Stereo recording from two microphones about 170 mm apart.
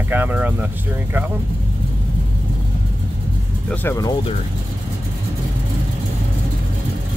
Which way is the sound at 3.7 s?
15° left (ahead or behind).